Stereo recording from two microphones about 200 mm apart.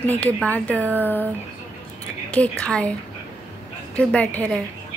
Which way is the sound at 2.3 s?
5° left (ahead or behind).